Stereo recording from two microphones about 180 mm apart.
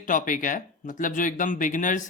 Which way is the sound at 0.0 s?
45° left (ahead or behind).